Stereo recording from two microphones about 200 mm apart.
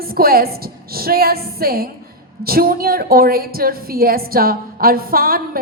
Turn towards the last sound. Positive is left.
turn(degrees=-45)  # may be behind; listen again after turning